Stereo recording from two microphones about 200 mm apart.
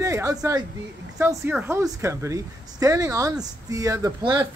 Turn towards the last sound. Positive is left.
turn(degrees=-20)  # may be behind; listen again after turning